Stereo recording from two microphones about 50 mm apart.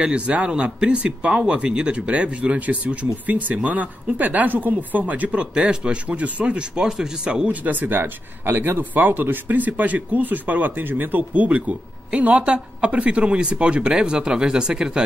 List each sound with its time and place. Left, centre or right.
0.0 s speech: right
6.8 s speech: centre
7.4 s speech: right; by 15.0 s centre